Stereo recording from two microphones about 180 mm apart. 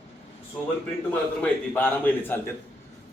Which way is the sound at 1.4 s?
10° left (ahead or behind).